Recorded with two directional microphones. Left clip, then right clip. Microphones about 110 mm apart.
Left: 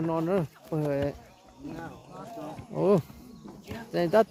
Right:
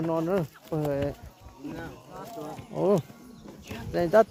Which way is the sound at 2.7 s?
35° left (ahead or behind).